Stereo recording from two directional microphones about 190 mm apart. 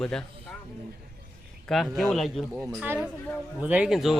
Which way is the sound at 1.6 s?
Centre (ahead or behind).